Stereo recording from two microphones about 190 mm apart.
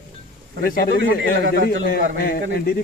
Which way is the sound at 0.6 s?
50° left (ahead or behind).